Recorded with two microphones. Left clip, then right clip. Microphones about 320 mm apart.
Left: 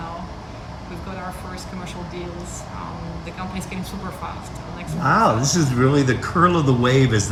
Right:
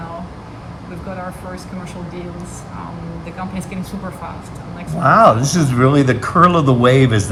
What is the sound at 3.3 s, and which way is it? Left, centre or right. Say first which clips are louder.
Speech: right 3 dB; centre.